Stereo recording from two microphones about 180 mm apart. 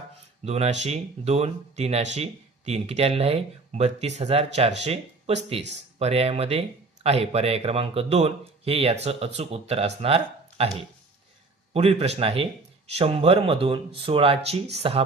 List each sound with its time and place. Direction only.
0.4 s speech: 35° right (ahead or behind)
11.7 s speech: 35° right (ahead or behind)